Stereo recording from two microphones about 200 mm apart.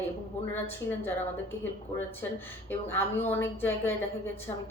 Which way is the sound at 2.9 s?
10° left (ahead or behind).